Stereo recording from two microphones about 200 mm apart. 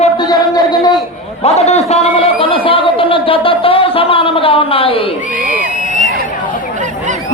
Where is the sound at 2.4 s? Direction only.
25° left (ahead or behind).